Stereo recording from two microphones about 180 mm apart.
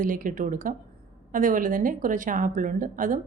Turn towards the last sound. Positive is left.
turn(degrees=-45)  # may be behind; listen again after turning